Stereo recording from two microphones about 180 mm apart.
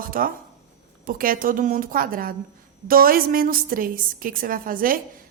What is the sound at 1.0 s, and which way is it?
A woman's voice, 50° right (ahead or behind).